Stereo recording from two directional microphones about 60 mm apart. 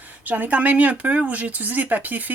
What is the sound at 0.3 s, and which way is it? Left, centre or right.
Speech, right.